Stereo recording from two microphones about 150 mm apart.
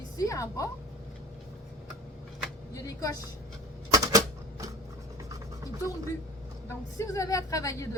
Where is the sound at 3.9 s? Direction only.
25° right (ahead or behind).